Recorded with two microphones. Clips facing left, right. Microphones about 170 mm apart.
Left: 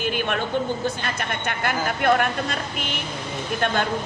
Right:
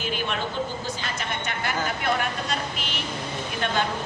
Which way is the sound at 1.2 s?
55° left (ahead or behind).